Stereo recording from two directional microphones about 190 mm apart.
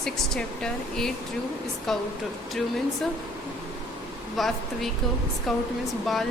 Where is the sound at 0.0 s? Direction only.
5° left (ahead or behind).